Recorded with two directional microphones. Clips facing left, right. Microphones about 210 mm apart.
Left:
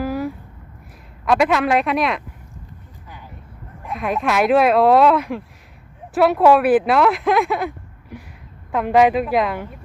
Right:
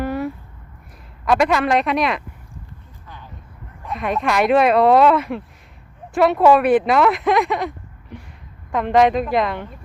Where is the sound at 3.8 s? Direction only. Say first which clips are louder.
Even; centre (ahead or behind).